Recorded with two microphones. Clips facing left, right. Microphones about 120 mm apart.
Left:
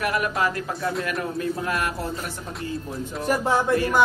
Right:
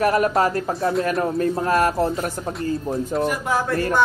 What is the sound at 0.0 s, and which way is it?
Speech, 35° right (ahead or behind).